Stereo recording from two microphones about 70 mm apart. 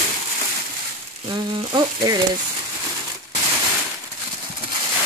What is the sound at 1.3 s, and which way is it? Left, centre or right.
Sizzle, right.